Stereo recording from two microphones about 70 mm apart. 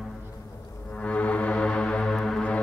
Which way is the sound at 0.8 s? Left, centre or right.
Left.